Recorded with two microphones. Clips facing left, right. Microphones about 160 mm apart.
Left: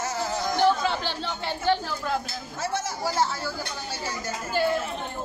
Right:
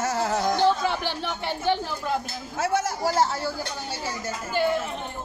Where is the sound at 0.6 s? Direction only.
20° right (ahead or behind).